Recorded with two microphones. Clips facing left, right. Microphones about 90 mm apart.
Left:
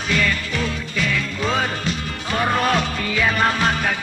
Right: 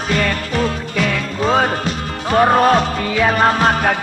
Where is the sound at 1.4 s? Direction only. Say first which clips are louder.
Right 9 dB; 40° right (ahead or behind).